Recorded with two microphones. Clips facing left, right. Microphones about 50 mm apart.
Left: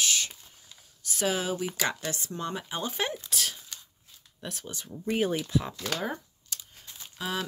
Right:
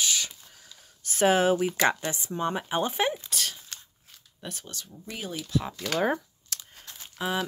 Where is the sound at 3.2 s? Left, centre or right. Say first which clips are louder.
Even; centre.